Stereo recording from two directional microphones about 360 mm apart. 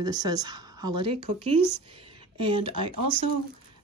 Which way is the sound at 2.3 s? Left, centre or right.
Centre.